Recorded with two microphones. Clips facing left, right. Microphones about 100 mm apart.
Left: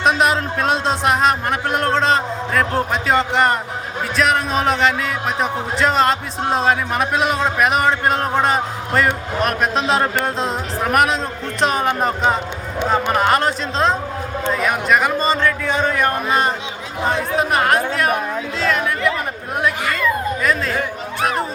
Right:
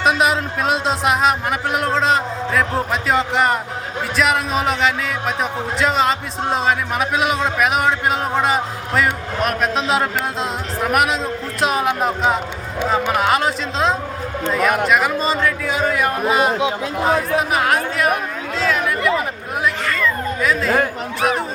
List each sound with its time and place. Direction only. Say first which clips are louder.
0.0 s a man's voice: even; centre (ahead or behind)
18.6 s chatter: right 1 dB; centre (ahead or behind)
19.8 s a sound: even; 10° left (ahead or behind)
20.4 s a man's voice: right 2 dB; centre (ahead or behind)